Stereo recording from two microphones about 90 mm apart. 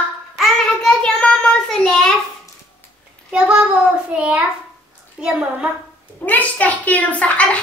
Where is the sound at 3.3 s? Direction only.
10° right (ahead or behind).